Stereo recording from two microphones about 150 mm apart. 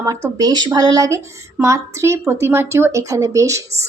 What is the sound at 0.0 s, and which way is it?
A woman's voice, 20° right (ahead or behind).